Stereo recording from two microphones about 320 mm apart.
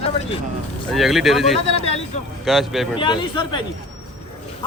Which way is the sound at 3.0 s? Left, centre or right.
Centre.